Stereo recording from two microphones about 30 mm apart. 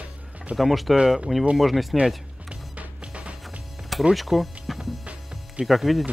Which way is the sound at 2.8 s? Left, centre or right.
Right.